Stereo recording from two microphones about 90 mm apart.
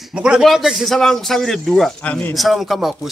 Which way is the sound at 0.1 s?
10° right (ahead or behind).